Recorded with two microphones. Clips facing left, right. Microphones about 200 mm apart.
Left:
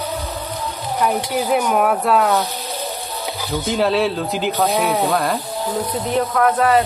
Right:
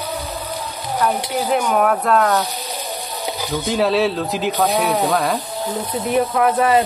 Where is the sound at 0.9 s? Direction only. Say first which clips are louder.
Even; 10° left (ahead or behind).